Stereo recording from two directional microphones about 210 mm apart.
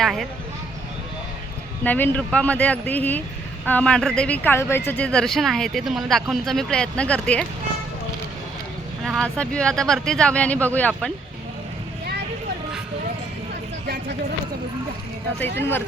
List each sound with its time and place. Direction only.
0.0 s speech: centre (ahead or behind)
1.8 s speech: 10° left (ahead or behind)
9.0 s speech: centre (ahead or behind)
13.8 s speech: 50° right (ahead or behind)
15.5 s speech: 10° left (ahead or behind)